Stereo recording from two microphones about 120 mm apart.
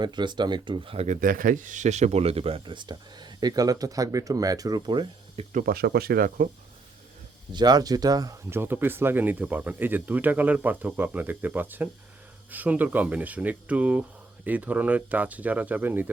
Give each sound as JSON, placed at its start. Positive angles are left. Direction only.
{"t": 0.0, "sound": "speech", "side_deg": -40}
{"t": 0.9, "sound": "speech", "side_deg": -80}
{"t": 5.4, "sound": "speech", "side_deg": -55}
{"t": 7.5, "sound": "speech", "side_deg": -35}
{"t": 8.4, "sound": "speech", "side_deg": -20}